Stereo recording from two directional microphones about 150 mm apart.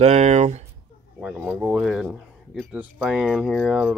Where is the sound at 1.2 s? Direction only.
10° right (ahead or behind).